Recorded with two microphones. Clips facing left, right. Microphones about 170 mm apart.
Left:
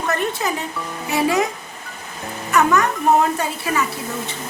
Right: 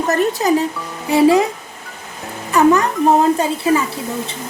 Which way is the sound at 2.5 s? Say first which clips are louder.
Right 4 dB; 30° right (ahead or behind).